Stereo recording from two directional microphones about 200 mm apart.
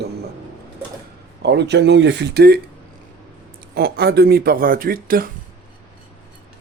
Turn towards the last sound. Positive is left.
turn(degrees=-45)  # may be behind; listen again after turning